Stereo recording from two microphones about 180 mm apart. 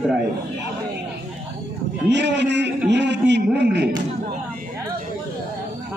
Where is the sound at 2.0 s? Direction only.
75° right (ahead or behind).